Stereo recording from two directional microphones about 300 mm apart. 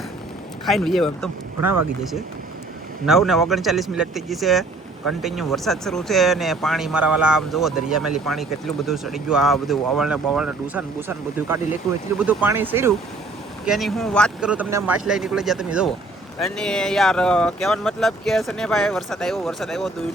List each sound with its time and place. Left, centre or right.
0.6 s speech: centre
3.1 s speech: centre
12.2 s speech: centre